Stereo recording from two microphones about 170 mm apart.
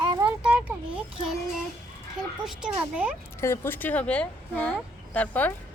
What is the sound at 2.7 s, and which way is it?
Speech, 10° right (ahead or behind).